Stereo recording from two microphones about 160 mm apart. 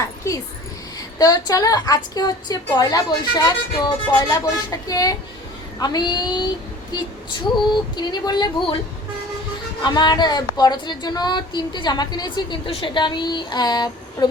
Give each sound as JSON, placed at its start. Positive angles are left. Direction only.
{"t": 0.9, "sound": "speech", "side_deg": 25}
{"t": 7.7, "sound": "speech", "side_deg": 25}
{"t": 9.8, "sound": "speech", "side_deg": 25}